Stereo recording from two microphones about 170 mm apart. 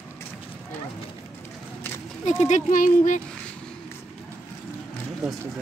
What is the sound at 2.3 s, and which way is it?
Speech, 45° left (ahead or behind).